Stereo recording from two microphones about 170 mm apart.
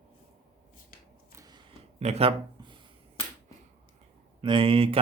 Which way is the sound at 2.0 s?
35° right (ahead or behind).